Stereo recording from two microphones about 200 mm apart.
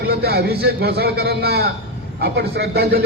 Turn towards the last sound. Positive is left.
turn(degrees=-50)  # may be behind; listen again after turning